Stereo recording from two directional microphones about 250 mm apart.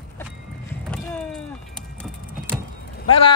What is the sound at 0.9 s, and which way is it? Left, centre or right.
Vehicle, centre.